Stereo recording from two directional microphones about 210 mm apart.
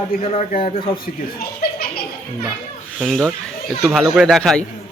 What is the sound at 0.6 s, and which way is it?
Speech, 25° left (ahead or behind).